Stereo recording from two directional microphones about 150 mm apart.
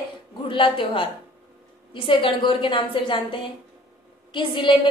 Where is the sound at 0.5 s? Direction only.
35° left (ahead or behind).